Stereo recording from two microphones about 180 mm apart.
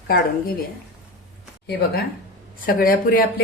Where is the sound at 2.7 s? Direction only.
55° left (ahead or behind).